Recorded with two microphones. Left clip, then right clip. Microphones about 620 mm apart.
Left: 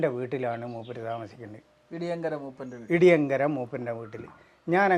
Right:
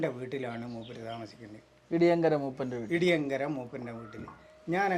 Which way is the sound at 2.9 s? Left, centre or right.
Left.